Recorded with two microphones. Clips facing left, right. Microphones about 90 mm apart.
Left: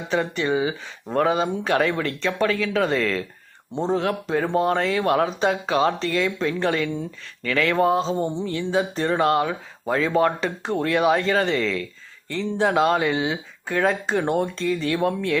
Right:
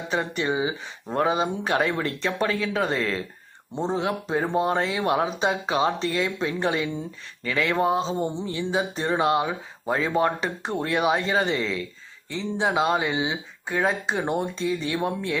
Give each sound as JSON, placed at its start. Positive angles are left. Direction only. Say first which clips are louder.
{"t": 0.1, "sound": "speech", "louder": "left 3 dB", "side_deg": -25}